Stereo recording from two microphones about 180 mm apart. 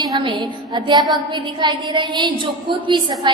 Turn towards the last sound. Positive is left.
turn(degrees=-25)  # may be behind; listen again after turning